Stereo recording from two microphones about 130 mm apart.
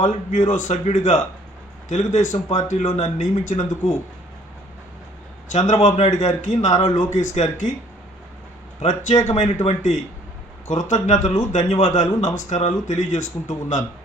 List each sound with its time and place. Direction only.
0.0 s speech: 70° left (ahead or behind)
5.5 s speech: 70° left (ahead or behind)
8.8 s speech: 65° left (ahead or behind)